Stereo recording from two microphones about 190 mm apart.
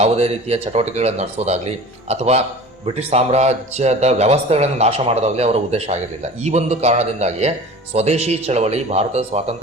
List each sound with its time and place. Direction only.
0.0 s speech: 35° right (ahead or behind)